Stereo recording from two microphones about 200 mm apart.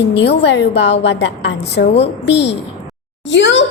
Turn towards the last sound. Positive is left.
turn(degrees=65)  # may be behind; listen again after turning